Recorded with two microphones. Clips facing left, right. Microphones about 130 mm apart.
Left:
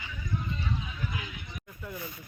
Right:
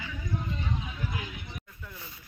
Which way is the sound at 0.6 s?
35° right (ahead or behind).